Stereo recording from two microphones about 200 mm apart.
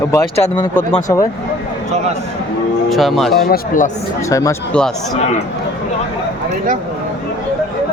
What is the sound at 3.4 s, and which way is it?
Speech, 45° left (ahead or behind).